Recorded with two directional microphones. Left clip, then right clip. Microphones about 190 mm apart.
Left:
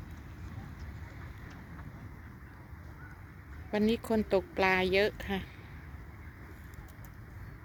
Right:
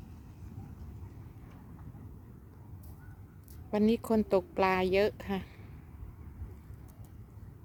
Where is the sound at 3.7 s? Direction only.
20° right (ahead or behind).